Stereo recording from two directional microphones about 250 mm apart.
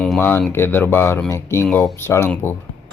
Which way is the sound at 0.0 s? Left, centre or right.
Centre.